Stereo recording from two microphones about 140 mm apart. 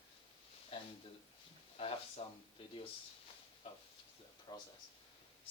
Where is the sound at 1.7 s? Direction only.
45° left (ahead or behind).